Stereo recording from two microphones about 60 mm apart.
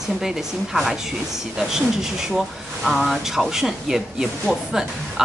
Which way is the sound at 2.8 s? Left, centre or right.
Centre.